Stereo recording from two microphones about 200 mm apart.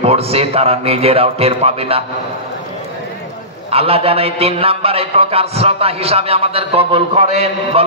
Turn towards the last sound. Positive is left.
turn(degrees=-30)  # may be behind; listen again after turning